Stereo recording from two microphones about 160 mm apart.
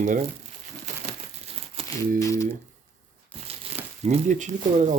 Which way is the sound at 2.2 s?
20° left (ahead or behind).